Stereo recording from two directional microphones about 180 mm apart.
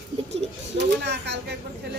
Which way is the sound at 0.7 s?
70° right (ahead or behind).